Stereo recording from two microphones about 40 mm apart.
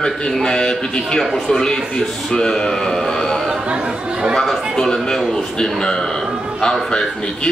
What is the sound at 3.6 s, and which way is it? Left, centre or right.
Speech, right.